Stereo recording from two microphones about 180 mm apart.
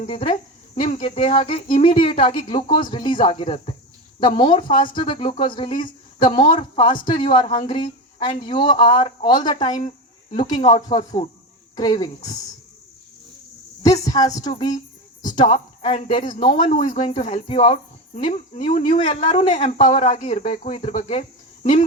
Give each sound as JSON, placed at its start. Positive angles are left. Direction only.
{"t": 0.1, "sound": "speech", "side_deg": 30}
{"t": 9.6, "sound": "speech", "side_deg": 45}
{"t": 10.9, "sound": "speech", "side_deg": 25}
{"t": 14.1, "sound": "speech", "side_deg": 20}
{"t": 16.7, "sound": "speech", "side_deg": 45}
{"t": 18.1, "sound": "speech", "side_deg": 40}